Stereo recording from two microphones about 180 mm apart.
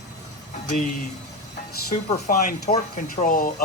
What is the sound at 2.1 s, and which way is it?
Speech, 50° left (ahead or behind).